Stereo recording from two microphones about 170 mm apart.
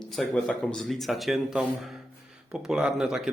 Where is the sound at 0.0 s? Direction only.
5° left (ahead or behind).